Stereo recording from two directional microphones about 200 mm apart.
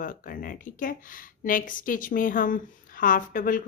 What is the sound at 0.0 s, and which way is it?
Speech, 45° left (ahead or behind).